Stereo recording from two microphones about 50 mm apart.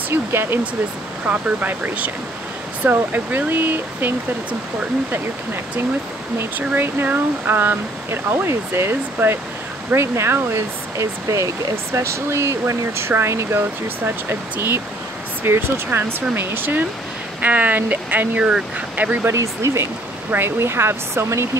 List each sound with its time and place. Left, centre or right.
0.1 s speech: right
1.2 s speech: right
6.7 s speech: right
11.9 s speech: right
13.6 s speech: right
17.4 s speech: right
19.2 s speech: right
20.2 s speech: right